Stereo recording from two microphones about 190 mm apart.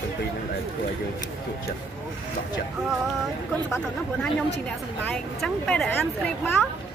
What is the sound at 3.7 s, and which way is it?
Speech, 5° left (ahead or behind).